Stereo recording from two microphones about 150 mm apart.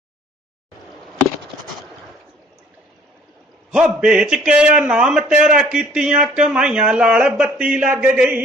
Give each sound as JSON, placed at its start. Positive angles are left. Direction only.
{"t": 3.7, "sound": "a man's voice", "side_deg": -5}